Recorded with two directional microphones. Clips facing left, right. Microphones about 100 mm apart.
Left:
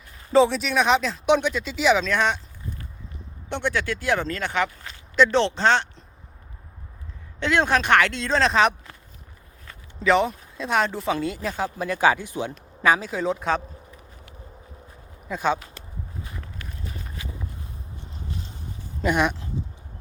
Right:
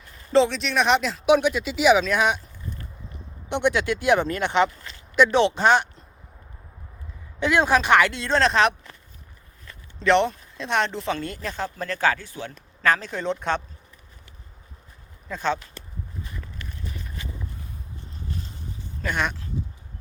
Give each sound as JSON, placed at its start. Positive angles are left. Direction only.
{"t": 0.3, "sound": "speech", "side_deg": 5}
{"t": 3.5, "sound": "speech", "side_deg": -20}
{"t": 7.3, "sound": "speech", "side_deg": -10}
{"t": 10.0, "sound": "speech", "side_deg": 5}
{"t": 15.3, "sound": "speech", "side_deg": 10}
{"t": 19.0, "sound": "speech", "side_deg": 10}